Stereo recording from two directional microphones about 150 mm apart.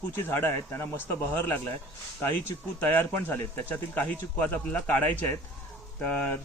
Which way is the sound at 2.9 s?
15° left (ahead or behind).